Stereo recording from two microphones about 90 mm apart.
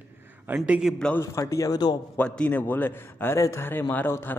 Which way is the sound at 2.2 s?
15° left (ahead or behind).